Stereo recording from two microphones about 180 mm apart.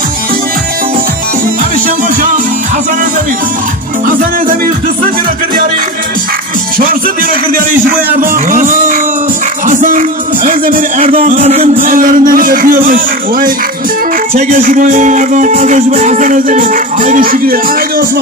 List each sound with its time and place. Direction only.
7.5 s music: 50° right (ahead or behind)
11.7 s music: 50° right (ahead or behind)